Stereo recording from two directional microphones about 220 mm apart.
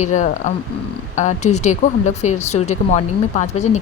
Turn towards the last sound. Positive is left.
turn(degrees=30)  # may be behind; listen again after turning